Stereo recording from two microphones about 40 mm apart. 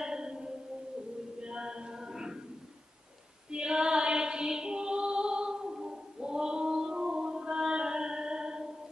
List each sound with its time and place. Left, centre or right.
0.0 s a sound: centre
1.4 s music: right
3.4 s female singing: right